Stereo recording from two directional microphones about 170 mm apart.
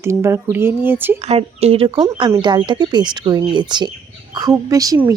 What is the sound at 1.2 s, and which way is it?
Speech, 40° right (ahead or behind).